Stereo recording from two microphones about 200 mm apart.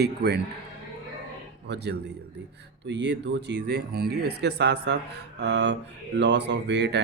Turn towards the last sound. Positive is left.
turn(degrees=-60)  # may be behind; listen again after turning